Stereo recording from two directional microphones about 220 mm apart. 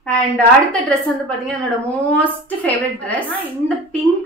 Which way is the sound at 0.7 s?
5° left (ahead or behind).